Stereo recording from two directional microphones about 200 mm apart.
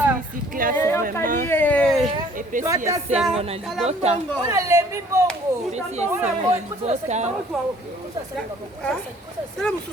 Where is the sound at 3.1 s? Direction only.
Centre (ahead or behind).